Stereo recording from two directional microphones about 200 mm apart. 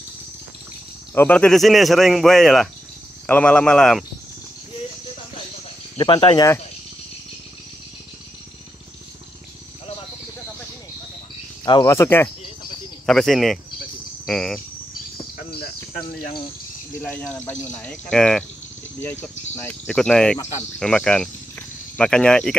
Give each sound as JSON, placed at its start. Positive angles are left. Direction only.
{"t": 1.1, "sound": "speech", "side_deg": 10}
{"t": 5.9, "sound": "speech", "side_deg": 25}
{"t": 11.6, "sound": "speech", "side_deg": 20}
{"t": 13.0, "sound": "speech", "side_deg": 0}
{"t": 17.0, "sound": "speech", "side_deg": 5}